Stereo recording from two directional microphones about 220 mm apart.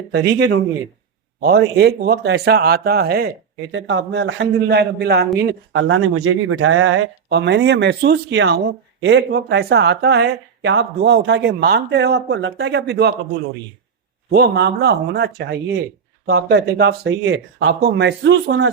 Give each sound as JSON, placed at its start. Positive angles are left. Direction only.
{"t": 0.1, "sound": "speech", "side_deg": -50}
{"t": 14.3, "sound": "speech", "side_deg": -45}